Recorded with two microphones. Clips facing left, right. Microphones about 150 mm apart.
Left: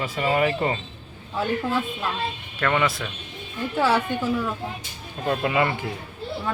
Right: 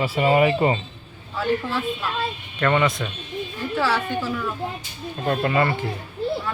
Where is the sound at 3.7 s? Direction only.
20° left (ahead or behind).